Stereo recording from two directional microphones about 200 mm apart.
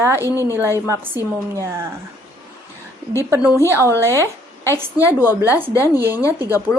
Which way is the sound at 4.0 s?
15° right (ahead or behind).